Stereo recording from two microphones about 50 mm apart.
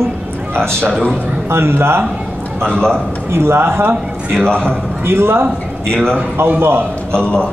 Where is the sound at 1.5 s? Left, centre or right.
Right.